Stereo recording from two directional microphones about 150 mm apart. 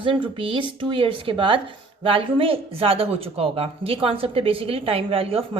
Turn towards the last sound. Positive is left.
turn(degrees=-40)  # may be behind; listen again after turning